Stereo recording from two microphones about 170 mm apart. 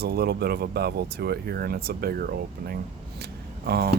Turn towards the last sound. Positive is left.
turn(degrees=-65)  # may be behind; listen again after turning